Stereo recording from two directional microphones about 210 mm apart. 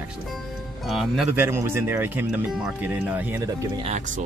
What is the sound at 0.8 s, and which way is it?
Speech, centre (ahead or behind).